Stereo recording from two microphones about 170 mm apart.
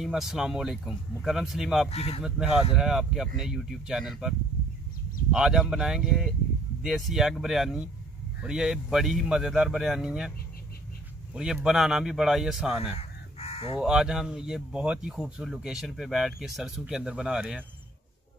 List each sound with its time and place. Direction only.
0.0 s speech: centre (ahead or behind)
1.9 s speech: 35° left (ahead or behind)
2.7 s speech: 5° right (ahead or behind)
11.3 s speech: 5° right (ahead or behind)
12.9 s crow: 35° left (ahead or behind)
13.7 s speech: 5° right (ahead or behind)